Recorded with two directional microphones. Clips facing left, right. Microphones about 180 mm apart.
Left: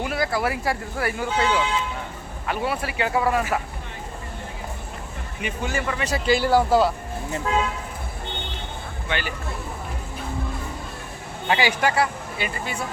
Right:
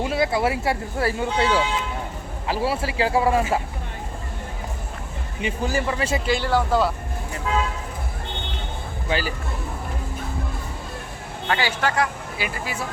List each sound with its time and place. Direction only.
0.0 s speech: 25° right (ahead or behind)
5.4 s speech: 30° right (ahead or behind)
6.2 s speech: 5° left (ahead or behind)
9.0 s speech: 35° right (ahead or behind)
11.4 s a man's voice: 15° left (ahead or behind)
12.4 s speech: 5° right (ahead or behind)